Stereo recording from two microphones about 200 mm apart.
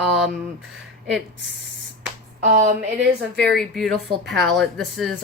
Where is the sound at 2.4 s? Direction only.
35° right (ahead or behind).